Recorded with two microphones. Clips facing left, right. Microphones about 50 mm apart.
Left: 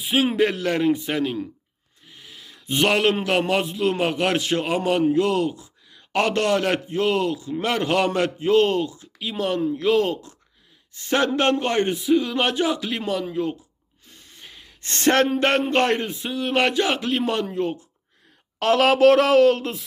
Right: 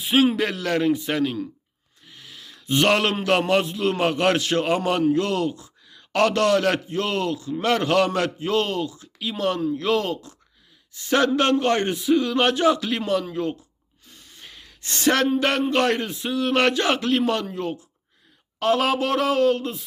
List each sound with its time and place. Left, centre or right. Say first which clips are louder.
0.0 s speech: right 3 dB; centre
0.3 s a man's voice: left 3 dB; left
1.0 s a man's voice: right 1 dB; centre
2.0 s a sound: even; centre
2.8 s a man's voice: left 1 dB; centre; by 9.0 s left
9.1 s speech: even; centre
9.6 s a man's voice: left 2 dB; left
11.7 s a man's voice: even; centre
14.1 s a sound: even; left
14.4 s a sound: even; centre
14.8 s a man's voice: left 2 dB; left
16.2 s a man's voice: right 3 dB; centre
18.6 s speech: left 5 dB; left